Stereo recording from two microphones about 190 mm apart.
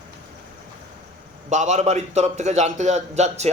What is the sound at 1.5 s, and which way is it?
A man's voice, 40° right (ahead or behind).